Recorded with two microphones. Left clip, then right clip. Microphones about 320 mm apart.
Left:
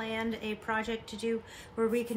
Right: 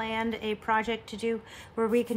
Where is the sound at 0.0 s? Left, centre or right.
Right.